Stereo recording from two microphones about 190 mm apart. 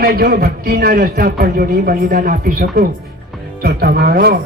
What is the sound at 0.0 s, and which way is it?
A man's voice, 55° right (ahead or behind).